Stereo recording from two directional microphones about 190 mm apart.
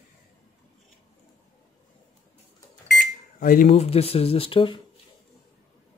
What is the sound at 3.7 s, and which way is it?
Speech, 30° left (ahead or behind).